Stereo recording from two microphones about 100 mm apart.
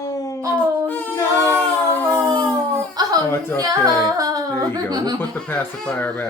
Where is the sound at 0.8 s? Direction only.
15° left (ahead or behind).